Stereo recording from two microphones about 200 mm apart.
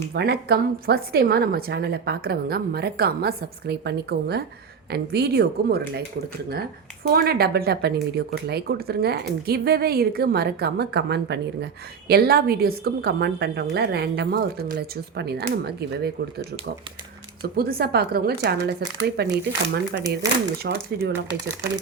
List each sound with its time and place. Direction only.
0.1 s speech: 55° right (ahead or behind)
7.1 s speech: 50° right (ahead or behind)
17.4 s speech: 50° right (ahead or behind)